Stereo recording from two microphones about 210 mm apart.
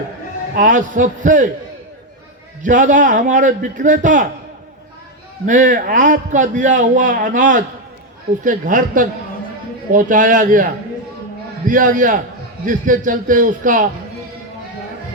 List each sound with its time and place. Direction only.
0.5 s a man's voice: 40° right (ahead or behind)
2.6 s a man's voice: 35° right (ahead or behind)
5.5 s a man's voice: 40° right (ahead or behind)